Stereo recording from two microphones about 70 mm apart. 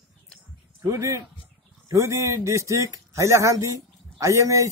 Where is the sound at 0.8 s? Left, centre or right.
Right.